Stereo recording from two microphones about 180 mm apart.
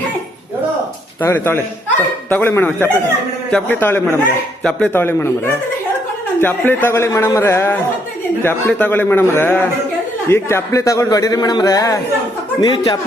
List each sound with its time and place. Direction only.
1.2 s a man's voice: 15° left (ahead or behind)